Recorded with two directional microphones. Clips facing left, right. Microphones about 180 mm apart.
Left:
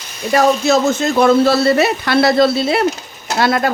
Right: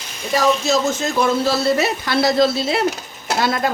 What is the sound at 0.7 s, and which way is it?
Speech, 60° left (ahead or behind).